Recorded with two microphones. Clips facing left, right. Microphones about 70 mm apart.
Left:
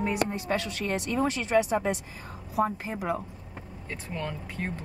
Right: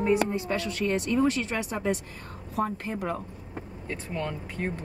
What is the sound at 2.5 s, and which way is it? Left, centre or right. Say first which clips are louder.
Speech: left 2 dB; centre.